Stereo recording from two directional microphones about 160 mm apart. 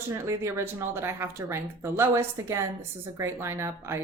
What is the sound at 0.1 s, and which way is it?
Speech, 20° right (ahead or behind).